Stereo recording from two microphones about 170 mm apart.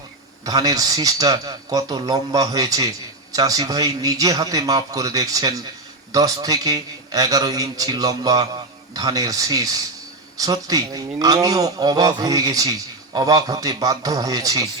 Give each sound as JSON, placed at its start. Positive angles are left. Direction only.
{"t": 0.4, "sound": "a man's voice", "side_deg": -20}